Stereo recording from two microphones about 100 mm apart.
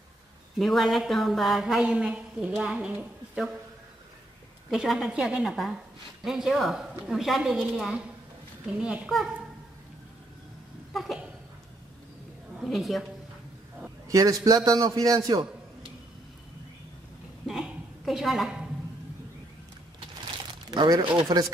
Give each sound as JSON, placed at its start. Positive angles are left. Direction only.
{"t": 0.6, "sound": "speech", "side_deg": 0}
{"t": 4.6, "sound": "a child's voice", "side_deg": -5}
{"t": 10.9, "sound": "a sound", "side_deg": 0}
{"t": 12.6, "sound": "speech", "side_deg": 0}
{"t": 14.0, "sound": "a man's voice", "side_deg": -35}
{"t": 17.5, "sound": "a sound", "side_deg": -5}
{"t": 20.7, "sound": "speech", "side_deg": -45}